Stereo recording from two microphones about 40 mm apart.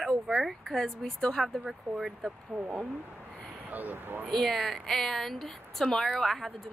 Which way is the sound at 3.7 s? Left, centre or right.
Right.